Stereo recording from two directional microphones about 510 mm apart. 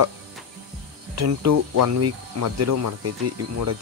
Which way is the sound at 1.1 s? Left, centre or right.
Right.